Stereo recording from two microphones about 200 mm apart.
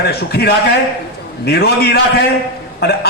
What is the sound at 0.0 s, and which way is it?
A man's voice, 50° left (ahead or behind).